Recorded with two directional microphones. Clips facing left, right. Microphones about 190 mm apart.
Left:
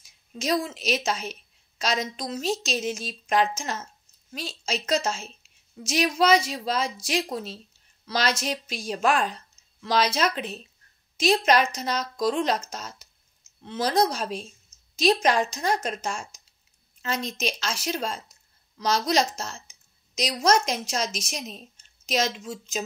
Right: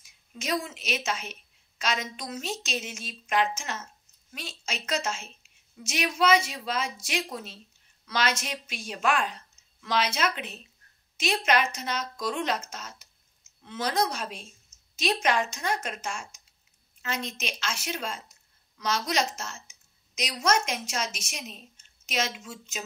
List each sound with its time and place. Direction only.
0.0 s a woman's voice: 35° left (ahead or behind)